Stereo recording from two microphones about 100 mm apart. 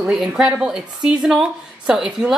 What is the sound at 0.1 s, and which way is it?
A woman's voice, 5° right (ahead or behind).